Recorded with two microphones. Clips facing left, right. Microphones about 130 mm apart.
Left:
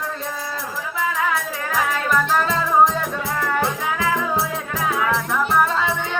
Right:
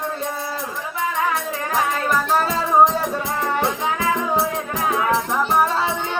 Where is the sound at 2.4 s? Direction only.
35° right (ahead or behind).